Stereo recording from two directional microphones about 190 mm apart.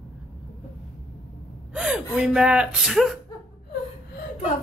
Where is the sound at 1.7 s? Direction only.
5° right (ahead or behind).